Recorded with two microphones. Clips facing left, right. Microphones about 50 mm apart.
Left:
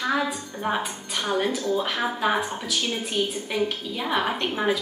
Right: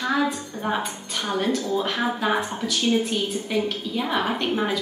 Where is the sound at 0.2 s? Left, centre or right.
Centre.